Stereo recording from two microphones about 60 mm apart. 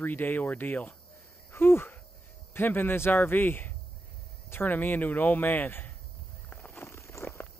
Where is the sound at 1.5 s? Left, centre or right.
Left.